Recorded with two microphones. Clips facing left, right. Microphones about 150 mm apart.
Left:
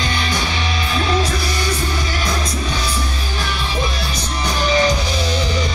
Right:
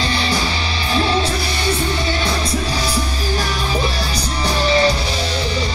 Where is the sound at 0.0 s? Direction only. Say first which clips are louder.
Right 2 dB; 30° right (ahead or behind).